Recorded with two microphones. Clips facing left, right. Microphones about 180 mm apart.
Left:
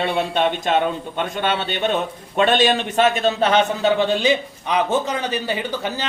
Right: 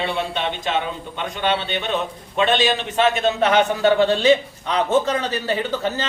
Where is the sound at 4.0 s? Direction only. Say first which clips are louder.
Right 3 dB; 15° left (ahead or behind).